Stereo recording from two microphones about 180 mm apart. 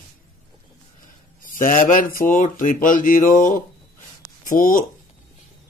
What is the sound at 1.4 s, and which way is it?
Speech, 50° left (ahead or behind).